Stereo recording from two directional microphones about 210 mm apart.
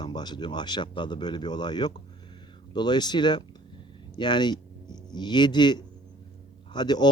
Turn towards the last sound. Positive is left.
turn(degrees=20)  # may be behind; listen again after turning